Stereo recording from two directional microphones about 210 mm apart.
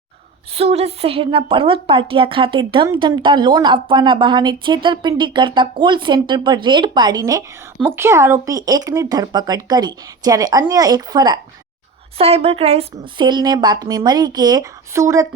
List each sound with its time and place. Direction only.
0.5 s a woman's voice: 30° right (ahead or behind); by 15.3 s 15° right (ahead or behind)